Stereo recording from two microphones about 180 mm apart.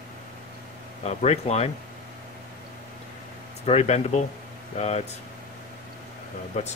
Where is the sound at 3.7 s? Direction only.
35° left (ahead or behind).